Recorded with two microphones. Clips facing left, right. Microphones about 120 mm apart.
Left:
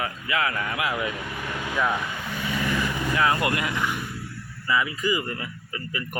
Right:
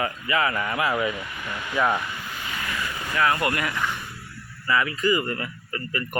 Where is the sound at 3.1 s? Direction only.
20° left (ahead or behind).